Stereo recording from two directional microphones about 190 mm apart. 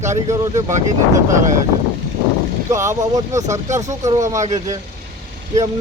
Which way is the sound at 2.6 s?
15° right (ahead or behind).